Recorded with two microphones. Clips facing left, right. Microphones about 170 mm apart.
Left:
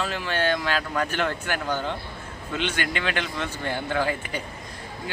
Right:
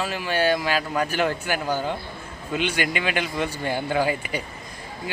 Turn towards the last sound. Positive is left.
turn(degrees=-10)  # may be behind; listen again after turning